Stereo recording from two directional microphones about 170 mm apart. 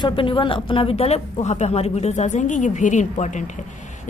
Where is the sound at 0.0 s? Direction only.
30° left (ahead or behind).